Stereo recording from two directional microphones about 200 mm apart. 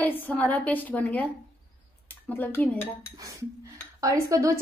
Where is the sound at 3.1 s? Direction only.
15° right (ahead or behind).